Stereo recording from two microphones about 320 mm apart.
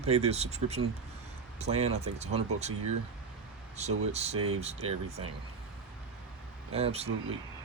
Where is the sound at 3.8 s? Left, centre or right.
Centre.